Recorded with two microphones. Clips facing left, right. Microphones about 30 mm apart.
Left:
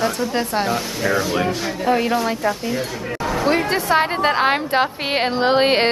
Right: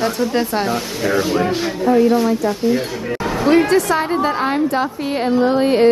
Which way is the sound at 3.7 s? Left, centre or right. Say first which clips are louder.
Right 2 dB; left.